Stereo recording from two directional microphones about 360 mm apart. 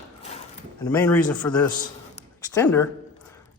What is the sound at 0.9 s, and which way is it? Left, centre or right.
A man's voice, centre.